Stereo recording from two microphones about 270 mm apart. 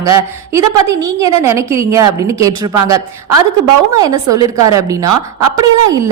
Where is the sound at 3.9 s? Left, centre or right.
Centre.